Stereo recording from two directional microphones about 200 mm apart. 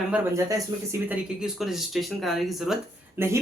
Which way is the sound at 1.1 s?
Centre (ahead or behind).